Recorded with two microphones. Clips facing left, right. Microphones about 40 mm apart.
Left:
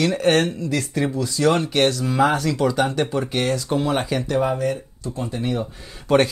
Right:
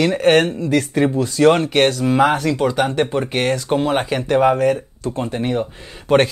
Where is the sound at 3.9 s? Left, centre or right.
Right.